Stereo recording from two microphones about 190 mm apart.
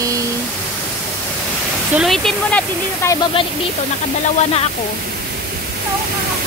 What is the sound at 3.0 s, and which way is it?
Speech, 15° left (ahead or behind).